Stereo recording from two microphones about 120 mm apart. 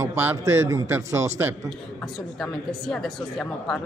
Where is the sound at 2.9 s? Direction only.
5° left (ahead or behind).